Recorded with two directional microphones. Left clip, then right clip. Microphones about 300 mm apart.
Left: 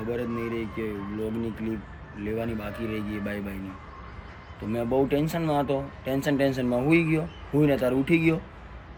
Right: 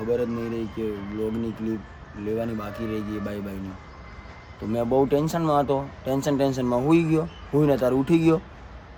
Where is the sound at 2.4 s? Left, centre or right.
Centre.